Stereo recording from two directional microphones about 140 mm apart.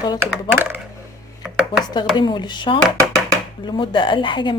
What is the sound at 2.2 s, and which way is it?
A woman's voice, 30° left (ahead or behind).